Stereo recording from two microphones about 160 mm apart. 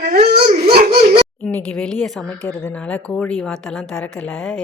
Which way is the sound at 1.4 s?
10° left (ahead or behind).